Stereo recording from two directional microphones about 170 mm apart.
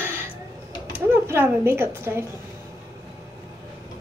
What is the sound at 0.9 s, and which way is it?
Speech, 15° right (ahead or behind).